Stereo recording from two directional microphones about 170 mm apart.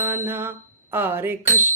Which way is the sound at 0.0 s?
15° right (ahead or behind).